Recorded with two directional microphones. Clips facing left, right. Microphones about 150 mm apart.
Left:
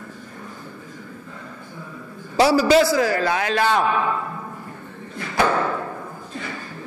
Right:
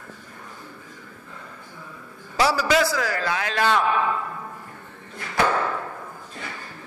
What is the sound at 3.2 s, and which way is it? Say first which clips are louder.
Speech: left 4 dB; 45° left (ahead or behind).